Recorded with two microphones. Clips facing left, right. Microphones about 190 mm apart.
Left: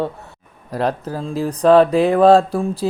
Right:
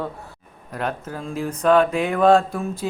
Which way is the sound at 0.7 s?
35° left (ahead or behind).